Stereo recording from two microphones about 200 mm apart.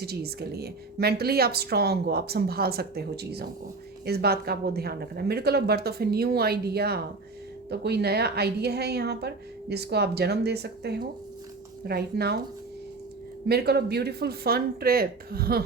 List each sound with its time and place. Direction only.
0.0 s a woman's voice: 50° right (ahead or behind)
13.5 s a woman's voice: 55° right (ahead or behind)